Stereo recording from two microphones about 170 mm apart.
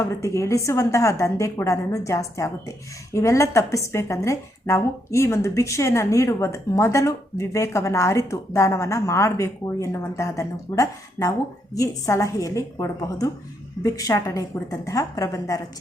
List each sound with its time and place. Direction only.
0.0 s a woman's voice: 15° left (ahead or behind)